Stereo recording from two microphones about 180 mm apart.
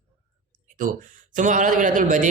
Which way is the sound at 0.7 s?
45° right (ahead or behind).